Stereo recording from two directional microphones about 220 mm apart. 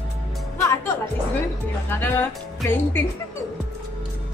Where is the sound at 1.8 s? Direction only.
10° left (ahead or behind).